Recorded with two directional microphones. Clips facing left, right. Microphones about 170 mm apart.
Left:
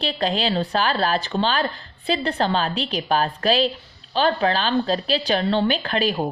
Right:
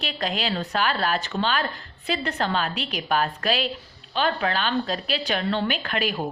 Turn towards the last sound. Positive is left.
turn(degrees=30)  # may be behind; listen again after turning